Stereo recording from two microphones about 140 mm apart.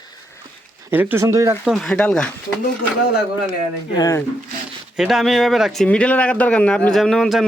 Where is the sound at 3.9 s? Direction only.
25° left (ahead or behind).